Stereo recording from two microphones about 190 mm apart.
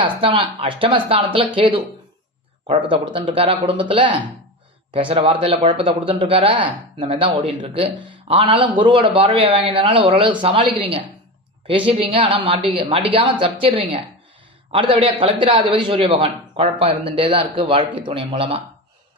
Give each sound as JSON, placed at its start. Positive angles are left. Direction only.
{"t": 0.0, "sound": "a man's voice", "side_deg": -30}